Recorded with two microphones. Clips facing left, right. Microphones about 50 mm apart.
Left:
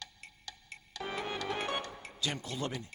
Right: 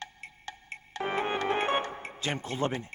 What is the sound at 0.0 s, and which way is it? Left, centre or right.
Music, right.